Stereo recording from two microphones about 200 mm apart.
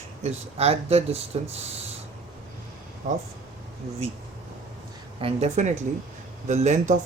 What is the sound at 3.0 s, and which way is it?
Speech, 40° right (ahead or behind).